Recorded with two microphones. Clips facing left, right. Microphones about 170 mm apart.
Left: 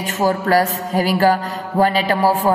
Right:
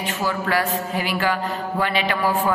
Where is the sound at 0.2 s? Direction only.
40° left (ahead or behind).